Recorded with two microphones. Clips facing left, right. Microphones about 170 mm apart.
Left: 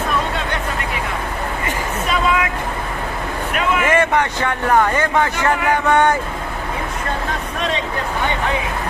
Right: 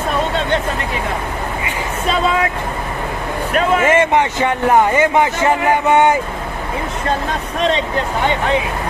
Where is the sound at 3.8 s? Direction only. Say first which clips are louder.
Right 3 dB; 15° right (ahead or behind).